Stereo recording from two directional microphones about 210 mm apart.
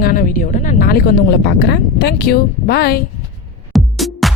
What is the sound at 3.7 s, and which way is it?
Music, centre (ahead or behind).